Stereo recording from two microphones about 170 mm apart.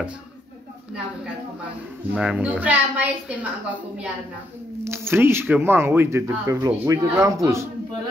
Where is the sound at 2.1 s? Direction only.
5° right (ahead or behind).